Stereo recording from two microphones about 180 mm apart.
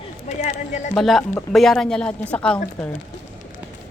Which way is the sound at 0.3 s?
40° left (ahead or behind).